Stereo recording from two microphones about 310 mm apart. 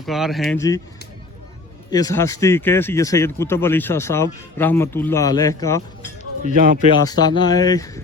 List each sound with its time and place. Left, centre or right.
0.0 s speech: centre
1.9 s speech: centre
6.4 s a man's voice: right
7.1 s speech: centre